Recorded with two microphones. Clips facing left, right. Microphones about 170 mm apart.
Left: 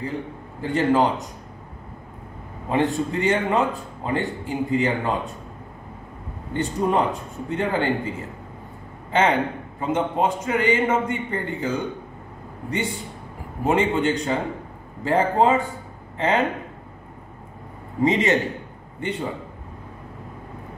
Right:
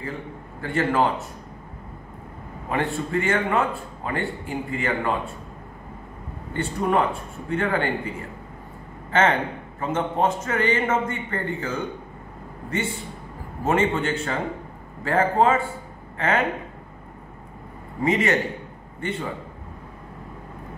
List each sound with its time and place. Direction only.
0.6 s a man's voice: 20° left (ahead or behind)
2.7 s a man's voice: 20° left (ahead or behind)
6.5 s a man's voice: 20° left (ahead or behind)
9.1 s a man's voice: 15° left (ahead or behind)
18.0 s a man's voice: 20° left (ahead or behind)